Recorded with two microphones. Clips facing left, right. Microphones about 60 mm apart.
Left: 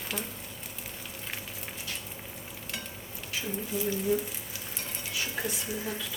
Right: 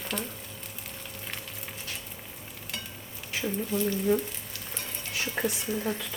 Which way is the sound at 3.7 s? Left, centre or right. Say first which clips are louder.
Right 4 dB; centre.